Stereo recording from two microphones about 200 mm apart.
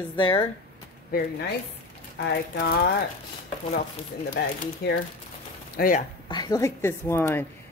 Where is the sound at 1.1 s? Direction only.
50° left (ahead or behind).